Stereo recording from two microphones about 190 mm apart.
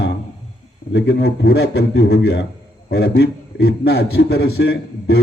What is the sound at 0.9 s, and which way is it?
A man's voice, 60° left (ahead or behind).